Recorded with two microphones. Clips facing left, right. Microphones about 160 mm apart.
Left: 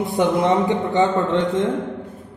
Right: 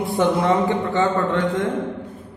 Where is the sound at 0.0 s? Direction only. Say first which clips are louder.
Left 1 dB; 20° left (ahead or behind).